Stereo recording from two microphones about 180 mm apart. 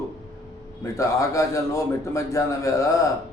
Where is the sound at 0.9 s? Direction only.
15° left (ahead or behind).